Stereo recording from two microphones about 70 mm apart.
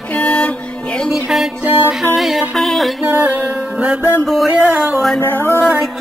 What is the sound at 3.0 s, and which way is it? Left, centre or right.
Music, right.